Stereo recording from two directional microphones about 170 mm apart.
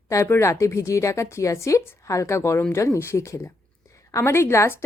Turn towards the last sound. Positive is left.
turn(degrees=15)  # may be behind; listen again after turning